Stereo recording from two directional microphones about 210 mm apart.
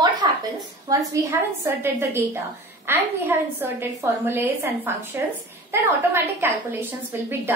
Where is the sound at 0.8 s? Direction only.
15° right (ahead or behind).